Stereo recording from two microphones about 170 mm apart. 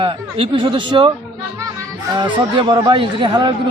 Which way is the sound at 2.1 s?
30° right (ahead or behind).